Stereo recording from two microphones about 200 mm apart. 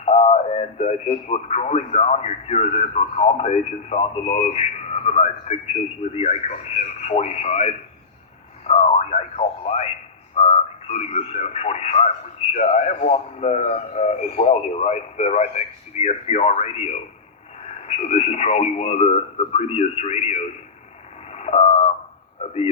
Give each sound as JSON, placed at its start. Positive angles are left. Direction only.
{"t": 0.0, "sound": "speech", "side_deg": 30}
{"t": 8.6, "sound": "radio", "side_deg": 35}
{"t": 10.3, "sound": "speech", "side_deg": 30}
{"t": 21.3, "sound": "a sound", "side_deg": 30}